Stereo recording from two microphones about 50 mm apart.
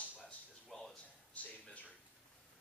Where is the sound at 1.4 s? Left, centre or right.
Left.